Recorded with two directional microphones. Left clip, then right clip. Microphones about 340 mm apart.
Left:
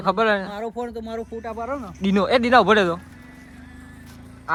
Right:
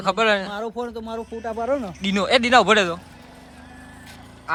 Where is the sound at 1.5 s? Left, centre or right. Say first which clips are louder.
Right 7 dB; right.